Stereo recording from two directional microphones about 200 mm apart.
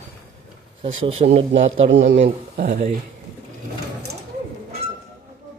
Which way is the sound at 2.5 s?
50° right (ahead or behind).